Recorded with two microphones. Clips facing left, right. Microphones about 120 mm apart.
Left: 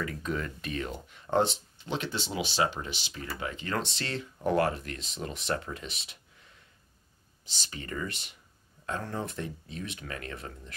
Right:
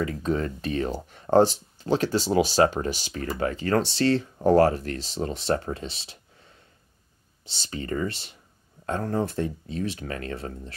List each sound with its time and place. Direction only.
0.0 s speech: 35° right (ahead or behind)
7.7 s speech: 35° right (ahead or behind)